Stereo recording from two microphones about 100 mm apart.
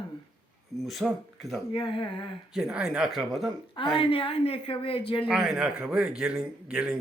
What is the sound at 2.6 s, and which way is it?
Speech, 5° right (ahead or behind).